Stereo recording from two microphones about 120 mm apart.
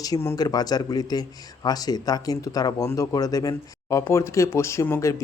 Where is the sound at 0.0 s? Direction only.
25° left (ahead or behind).